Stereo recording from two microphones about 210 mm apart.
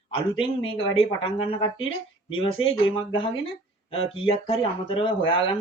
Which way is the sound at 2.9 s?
25° left (ahead or behind).